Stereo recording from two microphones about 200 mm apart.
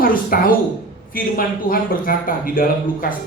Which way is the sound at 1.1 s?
45° left (ahead or behind).